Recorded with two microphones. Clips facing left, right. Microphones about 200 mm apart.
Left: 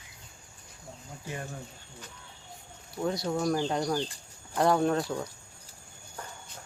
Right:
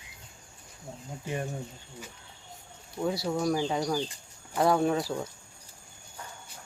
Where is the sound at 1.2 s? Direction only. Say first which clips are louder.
Right 5 dB; 20° right (ahead or behind).